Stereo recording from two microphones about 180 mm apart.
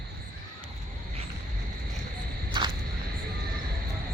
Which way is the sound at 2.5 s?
25° right (ahead or behind).